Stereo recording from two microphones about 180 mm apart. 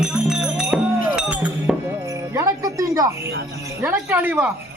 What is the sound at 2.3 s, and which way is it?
Music, 15° right (ahead or behind).